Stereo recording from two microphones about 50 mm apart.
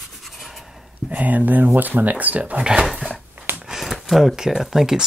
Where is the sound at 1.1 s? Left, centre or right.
Right.